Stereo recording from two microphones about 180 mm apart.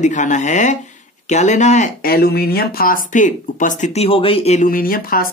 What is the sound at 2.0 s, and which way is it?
Speech, 60° left (ahead or behind).